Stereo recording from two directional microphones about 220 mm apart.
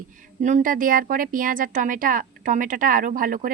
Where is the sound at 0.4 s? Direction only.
35° right (ahead or behind).